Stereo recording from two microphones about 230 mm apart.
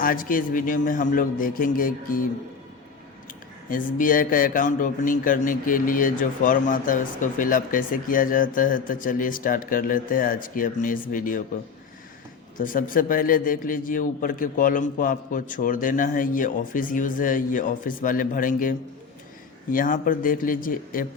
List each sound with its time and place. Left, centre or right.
0.0 s a man's voice: left
3.7 s a man's voice: left
12.5 s a man's voice: left
19.7 s a man's voice: left